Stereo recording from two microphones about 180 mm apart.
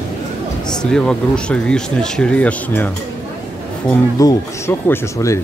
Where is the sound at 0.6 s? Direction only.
5° left (ahead or behind).